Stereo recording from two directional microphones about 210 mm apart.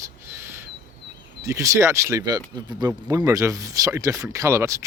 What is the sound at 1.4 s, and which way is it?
Speech, 15° right (ahead or behind).